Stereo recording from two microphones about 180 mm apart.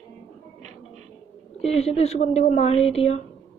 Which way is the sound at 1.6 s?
35° left (ahead or behind).